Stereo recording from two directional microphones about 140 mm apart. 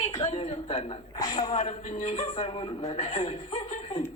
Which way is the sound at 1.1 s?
30° left (ahead or behind).